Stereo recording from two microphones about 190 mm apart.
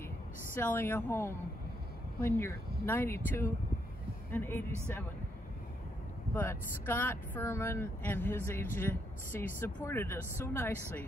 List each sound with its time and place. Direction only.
0.6 s speech: 10° left (ahead or behind)
6.3 s speech: 10° left (ahead or behind)
9.7 s speech: 20° left (ahead or behind)